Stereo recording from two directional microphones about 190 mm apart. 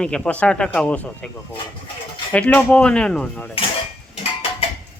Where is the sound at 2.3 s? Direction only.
5° left (ahead or behind).